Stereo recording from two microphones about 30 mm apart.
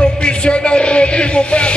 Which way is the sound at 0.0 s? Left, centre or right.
Left.